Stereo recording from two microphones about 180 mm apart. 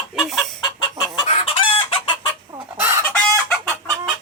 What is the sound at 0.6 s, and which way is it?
Chicken, 25° left (ahead or behind).